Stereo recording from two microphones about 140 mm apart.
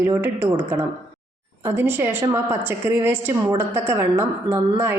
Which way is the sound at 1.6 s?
15° right (ahead or behind).